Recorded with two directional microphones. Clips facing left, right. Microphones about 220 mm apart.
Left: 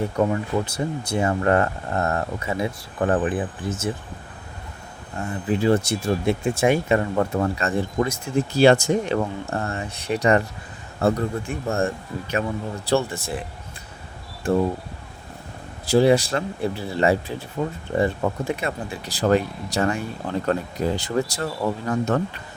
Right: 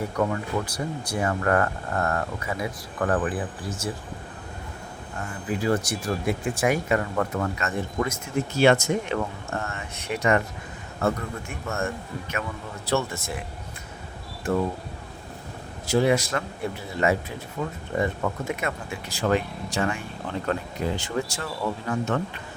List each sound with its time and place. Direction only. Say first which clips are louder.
0.2 s speech: left 3 dB; 25° left (ahead or behind)
5.1 s speech: left 6 dB; 30° left (ahead or behind)
15.9 s speech: left 5 dB; 30° left (ahead or behind)